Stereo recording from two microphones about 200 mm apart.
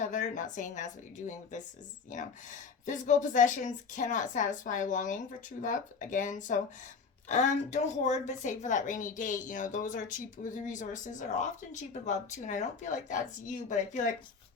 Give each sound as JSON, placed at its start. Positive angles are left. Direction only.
{"t": 0.0, "sound": "a woman's voice", "side_deg": 40}